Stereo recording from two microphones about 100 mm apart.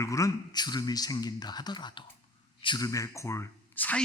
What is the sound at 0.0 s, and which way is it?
A man's voice, 35° left (ahead or behind).